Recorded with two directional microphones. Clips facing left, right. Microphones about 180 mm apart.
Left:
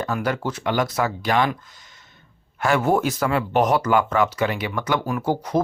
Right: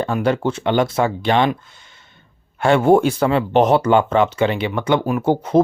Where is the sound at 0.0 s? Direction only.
25° right (ahead or behind).